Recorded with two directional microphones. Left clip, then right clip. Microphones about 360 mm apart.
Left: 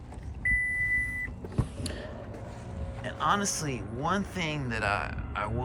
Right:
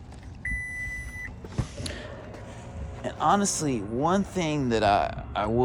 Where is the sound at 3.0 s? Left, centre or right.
Centre.